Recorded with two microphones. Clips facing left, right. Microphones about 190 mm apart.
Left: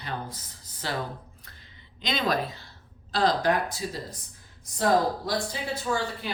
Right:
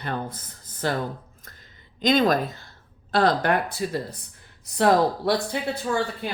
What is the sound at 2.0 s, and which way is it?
Speech, 45° right (ahead or behind).